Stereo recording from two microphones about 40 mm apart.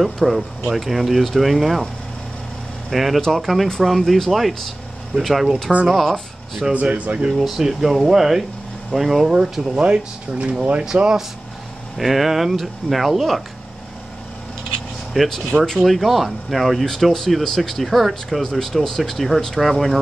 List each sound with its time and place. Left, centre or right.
0.0 s speech: centre
2.9 s speech: centre
6.7 s speech: right
7.4 s speech: centre
9.3 s speech: right
12.0 s speech: centre
15.2 s speech: centre
15.5 s speech: centre
15.8 s speech: centre
16.8 s speech: centre